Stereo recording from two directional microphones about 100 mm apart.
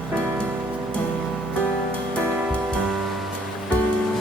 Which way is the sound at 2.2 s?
15° right (ahead or behind).